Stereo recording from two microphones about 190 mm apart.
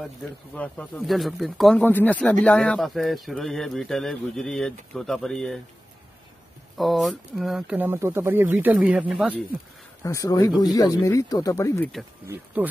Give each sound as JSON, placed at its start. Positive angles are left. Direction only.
{"t": 0.6, "sound": "speech", "side_deg": 5}
{"t": 6.8, "sound": "speech", "side_deg": 0}
{"t": 10.0, "sound": "speech", "side_deg": 15}